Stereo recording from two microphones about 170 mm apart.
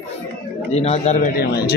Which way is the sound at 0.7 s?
40° left (ahead or behind).